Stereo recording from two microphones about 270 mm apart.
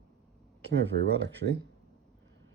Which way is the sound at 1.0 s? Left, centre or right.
Right.